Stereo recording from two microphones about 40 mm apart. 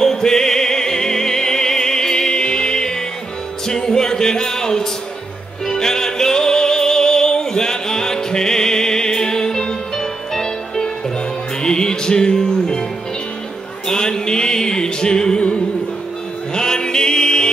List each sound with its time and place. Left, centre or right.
0.0 s music: centre
13.8 s music: centre